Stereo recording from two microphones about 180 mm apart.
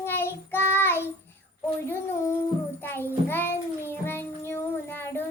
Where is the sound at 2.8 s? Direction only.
10° left (ahead or behind).